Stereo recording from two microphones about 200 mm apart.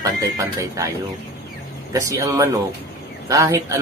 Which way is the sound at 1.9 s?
15° right (ahead or behind).